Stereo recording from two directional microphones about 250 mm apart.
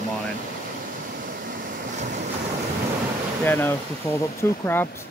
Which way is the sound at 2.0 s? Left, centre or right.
Right.